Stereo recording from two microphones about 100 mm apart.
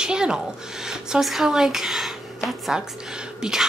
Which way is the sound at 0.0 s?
10° right (ahead or behind).